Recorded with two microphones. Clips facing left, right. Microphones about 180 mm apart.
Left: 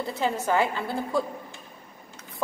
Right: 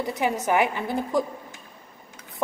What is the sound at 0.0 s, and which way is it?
A woman's voice, 20° right (ahead or behind).